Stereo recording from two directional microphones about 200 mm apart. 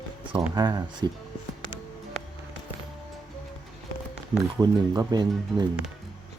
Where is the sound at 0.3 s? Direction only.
20° right (ahead or behind).